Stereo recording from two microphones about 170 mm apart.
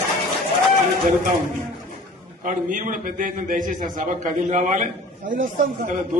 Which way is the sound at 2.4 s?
50° right (ahead or behind).